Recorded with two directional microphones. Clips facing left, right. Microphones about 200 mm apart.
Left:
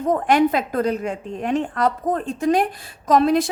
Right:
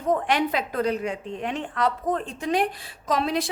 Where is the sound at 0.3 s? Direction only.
45° left (ahead or behind).